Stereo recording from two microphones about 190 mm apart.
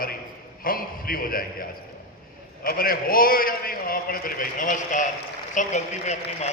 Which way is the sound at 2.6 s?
50° left (ahead or behind).